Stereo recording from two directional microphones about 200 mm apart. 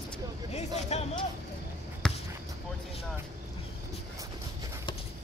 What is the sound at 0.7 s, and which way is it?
Speech, 35° left (ahead or behind).